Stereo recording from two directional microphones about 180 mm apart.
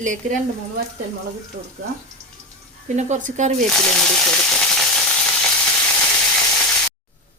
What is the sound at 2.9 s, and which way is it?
Speech, 40° right (ahead or behind).